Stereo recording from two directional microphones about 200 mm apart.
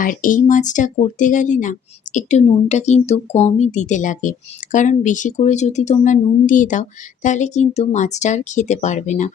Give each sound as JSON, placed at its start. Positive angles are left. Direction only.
{"t": 0.0, "sound": "a woman's voice", "side_deg": 45}